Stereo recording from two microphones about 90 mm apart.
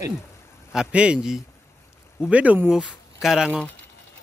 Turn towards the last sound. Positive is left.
turn(degrees=-10)  # may be behind; listen again after turning